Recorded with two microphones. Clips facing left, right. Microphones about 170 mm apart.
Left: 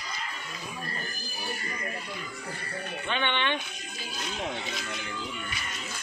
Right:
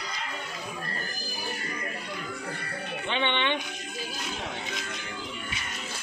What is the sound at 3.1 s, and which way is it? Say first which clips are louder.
Music: right 1 dB; 20° right (ahead or behind).